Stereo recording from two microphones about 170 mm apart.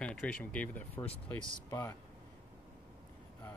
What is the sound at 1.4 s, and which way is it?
Speech, 30° left (ahead or behind).